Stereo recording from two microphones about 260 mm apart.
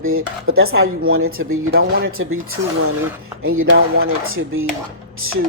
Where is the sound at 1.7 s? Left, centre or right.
Right.